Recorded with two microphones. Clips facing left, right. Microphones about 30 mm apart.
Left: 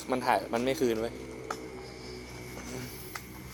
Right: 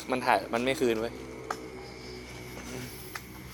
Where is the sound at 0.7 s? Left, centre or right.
Right.